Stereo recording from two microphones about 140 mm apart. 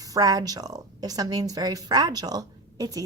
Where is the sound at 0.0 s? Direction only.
25° right (ahead or behind).